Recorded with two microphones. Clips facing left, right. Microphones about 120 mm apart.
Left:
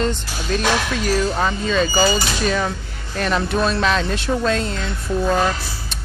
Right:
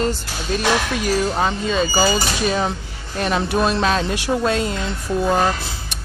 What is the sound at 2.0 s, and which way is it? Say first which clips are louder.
Speech: even; 5° right (ahead or behind).